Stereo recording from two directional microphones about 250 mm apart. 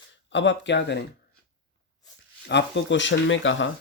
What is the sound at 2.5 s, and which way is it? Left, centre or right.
Speech, left.